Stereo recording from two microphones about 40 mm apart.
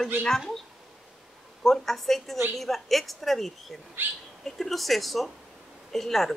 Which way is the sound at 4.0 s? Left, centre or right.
Right.